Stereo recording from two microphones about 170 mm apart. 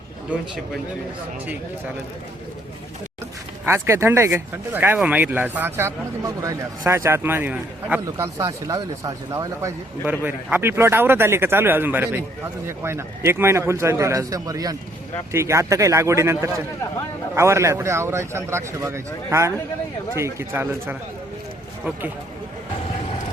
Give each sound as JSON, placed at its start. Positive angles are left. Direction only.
{"t": 0.3, "sound": "speech", "side_deg": -5}
{"t": 3.7, "sound": "speech", "side_deg": -15}
{"t": 8.0, "sound": "speech", "side_deg": -20}